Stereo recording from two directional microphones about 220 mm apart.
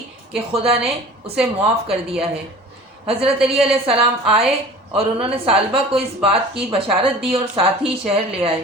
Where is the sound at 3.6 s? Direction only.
25° right (ahead or behind).